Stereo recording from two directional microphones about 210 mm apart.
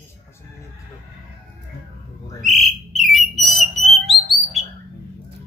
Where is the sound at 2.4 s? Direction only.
Centre (ahead or behind).